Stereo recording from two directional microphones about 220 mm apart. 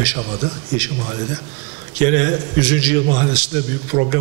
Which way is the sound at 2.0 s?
15° right (ahead or behind).